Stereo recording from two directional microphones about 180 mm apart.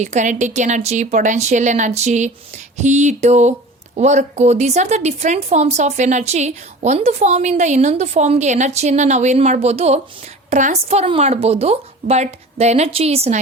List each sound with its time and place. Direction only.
0.0 s speech: 40° right (ahead or behind)